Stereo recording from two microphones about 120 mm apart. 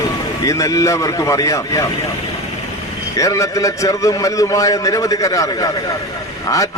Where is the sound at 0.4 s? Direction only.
25° left (ahead or behind).